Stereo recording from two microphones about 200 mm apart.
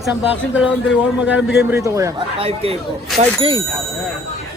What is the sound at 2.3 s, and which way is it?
Speech, 30° right (ahead or behind).